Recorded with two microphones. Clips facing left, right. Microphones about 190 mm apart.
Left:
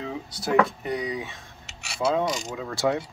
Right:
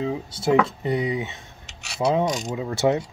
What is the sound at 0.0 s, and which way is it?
Speech, 25° right (ahead or behind).